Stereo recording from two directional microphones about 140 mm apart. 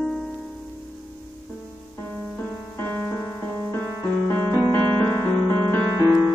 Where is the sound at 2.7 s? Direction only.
15° left (ahead or behind).